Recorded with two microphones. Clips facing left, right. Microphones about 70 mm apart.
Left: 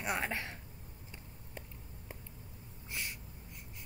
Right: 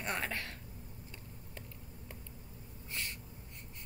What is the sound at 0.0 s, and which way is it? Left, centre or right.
Speech, centre.